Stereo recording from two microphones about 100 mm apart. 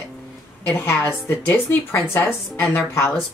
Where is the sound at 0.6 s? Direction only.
20° left (ahead or behind).